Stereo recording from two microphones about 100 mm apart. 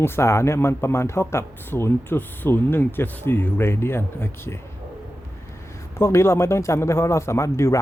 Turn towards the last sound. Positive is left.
turn(degrees=30)  # may be behind; listen again after turning